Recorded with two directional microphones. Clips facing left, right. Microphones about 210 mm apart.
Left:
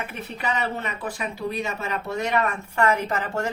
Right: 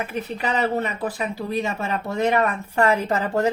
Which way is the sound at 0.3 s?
35° right (ahead or behind).